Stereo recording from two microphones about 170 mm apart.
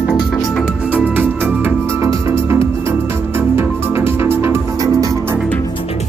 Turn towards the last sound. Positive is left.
turn(degrees=-20)  # may be behind; listen again after turning